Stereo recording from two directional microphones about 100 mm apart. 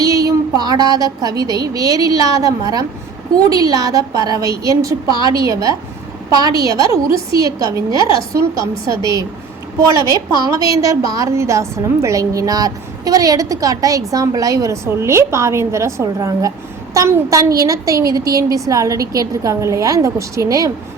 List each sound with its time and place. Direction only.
0.0 s child singing: 35° right (ahead or behind)
0.9 s a woman's voice: 40° right (ahead or behind)
10.4 s a woman's voice: 35° right (ahead or behind)